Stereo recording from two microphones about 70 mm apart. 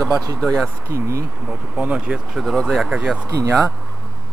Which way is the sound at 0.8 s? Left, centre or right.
Right.